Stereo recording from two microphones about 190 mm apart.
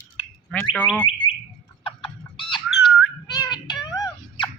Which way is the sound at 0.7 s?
10° left (ahead or behind).